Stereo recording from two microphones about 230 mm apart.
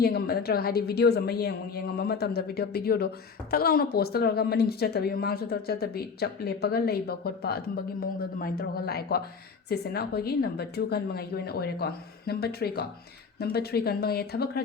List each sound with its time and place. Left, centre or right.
0.0 s a woman's voice: left